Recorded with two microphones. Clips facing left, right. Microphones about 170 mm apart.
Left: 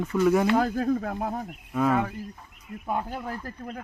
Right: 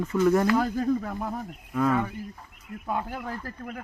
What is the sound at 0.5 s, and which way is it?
Speech, 55° left (ahead or behind).